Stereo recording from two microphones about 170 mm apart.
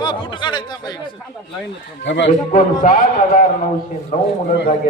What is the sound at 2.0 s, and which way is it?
Speech, 90° left.